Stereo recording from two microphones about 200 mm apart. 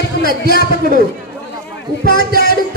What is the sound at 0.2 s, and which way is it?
Speech, 50° left (ahead or behind).